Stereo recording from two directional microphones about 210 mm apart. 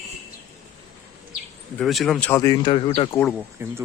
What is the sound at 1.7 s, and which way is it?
Speech, centre (ahead or behind).